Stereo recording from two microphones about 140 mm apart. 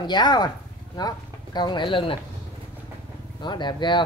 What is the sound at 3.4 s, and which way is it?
Speech, 30° left (ahead or behind).